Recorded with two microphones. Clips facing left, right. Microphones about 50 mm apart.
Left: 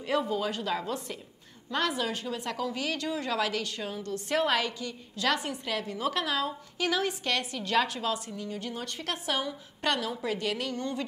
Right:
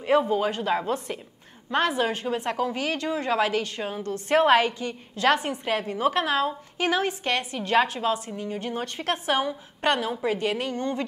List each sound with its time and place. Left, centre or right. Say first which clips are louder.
0.0 s a woman's voice: right 7 dB; right